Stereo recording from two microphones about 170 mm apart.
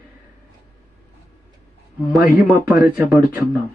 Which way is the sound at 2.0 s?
10° right (ahead or behind).